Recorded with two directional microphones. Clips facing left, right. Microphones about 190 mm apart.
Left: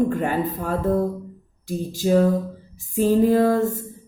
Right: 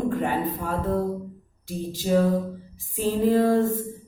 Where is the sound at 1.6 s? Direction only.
45° left (ahead or behind).